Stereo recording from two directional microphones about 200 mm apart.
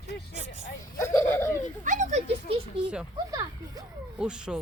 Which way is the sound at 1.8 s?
35° right (ahead or behind).